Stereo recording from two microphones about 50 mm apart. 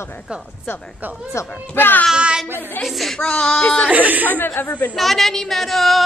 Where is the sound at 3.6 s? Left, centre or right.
Left.